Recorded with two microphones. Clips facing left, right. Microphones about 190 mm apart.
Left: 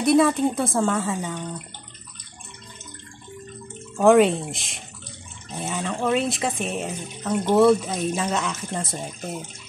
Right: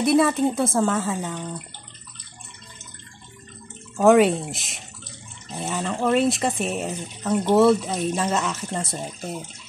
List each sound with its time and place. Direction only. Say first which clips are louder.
0.0 s speech: even; centre (ahead or behind)
4.0 s speech: even; centre (ahead or behind)